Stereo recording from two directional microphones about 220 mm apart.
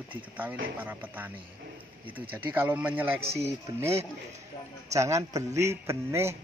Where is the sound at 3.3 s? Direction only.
30° right (ahead or behind).